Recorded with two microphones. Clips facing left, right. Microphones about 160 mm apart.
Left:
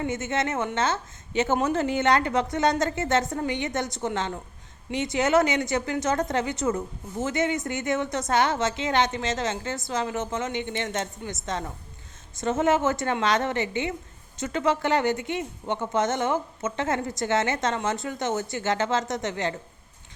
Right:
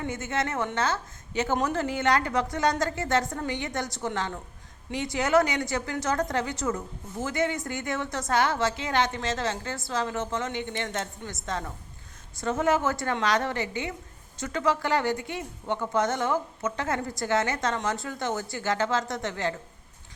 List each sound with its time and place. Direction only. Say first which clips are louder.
0.1 s a woman's voice: left 3 dB; 25° left (ahead or behind)